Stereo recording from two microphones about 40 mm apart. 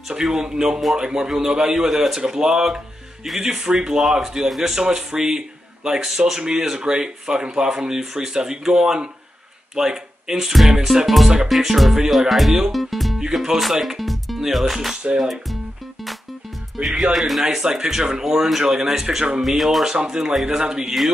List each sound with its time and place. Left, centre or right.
0.1 s speech: centre
4.7 s speech: centre
11.4 s music: centre
13.2 s speech: centre
17.0 s speech: centre
19.4 s music: centre
19.9 s speech: centre